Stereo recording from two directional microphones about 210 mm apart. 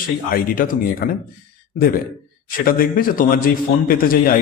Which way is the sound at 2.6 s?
45° left (ahead or behind).